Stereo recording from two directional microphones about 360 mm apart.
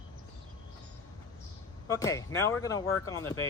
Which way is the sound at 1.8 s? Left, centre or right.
Centre.